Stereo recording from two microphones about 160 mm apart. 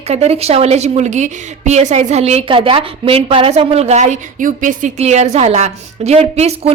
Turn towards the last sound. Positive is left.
turn(degrees=-40)  # may be behind; listen again after turning